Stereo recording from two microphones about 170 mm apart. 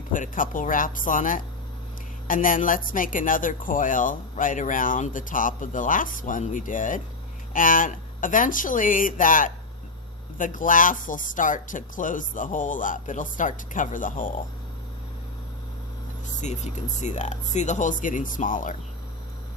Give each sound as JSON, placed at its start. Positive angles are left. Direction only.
{"t": 0.1, "sound": "speech", "side_deg": 50}
{"t": 16.4, "sound": "speech", "side_deg": 45}